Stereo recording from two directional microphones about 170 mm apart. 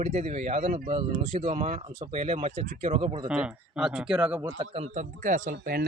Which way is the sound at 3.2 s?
5° right (ahead or behind).